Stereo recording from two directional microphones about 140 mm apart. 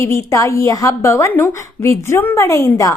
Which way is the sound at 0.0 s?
20° left (ahead or behind).